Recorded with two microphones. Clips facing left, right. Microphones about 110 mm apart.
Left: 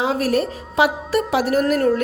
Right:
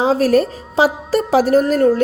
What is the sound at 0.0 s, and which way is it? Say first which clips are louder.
A woman's voice: right 6 dB; 35° right (ahead or behind).